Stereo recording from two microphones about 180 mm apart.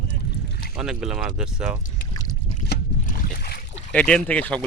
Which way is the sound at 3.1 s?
60° left (ahead or behind).